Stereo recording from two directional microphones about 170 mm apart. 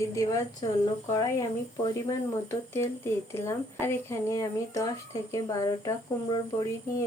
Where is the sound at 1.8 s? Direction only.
20° left (ahead or behind).